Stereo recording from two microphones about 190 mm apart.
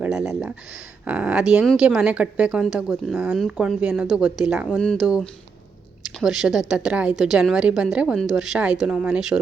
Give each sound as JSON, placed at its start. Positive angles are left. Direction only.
{"t": 0.0, "sound": "a woman's voice", "side_deg": -5}